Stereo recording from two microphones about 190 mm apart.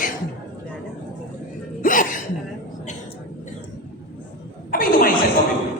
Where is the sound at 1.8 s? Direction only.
45° left (ahead or behind).